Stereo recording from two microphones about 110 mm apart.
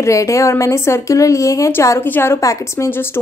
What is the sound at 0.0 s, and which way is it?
A woman's voice, 30° left (ahead or behind).